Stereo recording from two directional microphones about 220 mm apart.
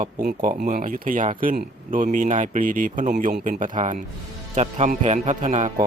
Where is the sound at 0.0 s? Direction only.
35° right (ahead or behind).